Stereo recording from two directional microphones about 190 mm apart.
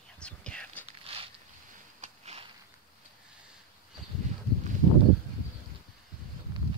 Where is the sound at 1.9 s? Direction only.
35° right (ahead or behind).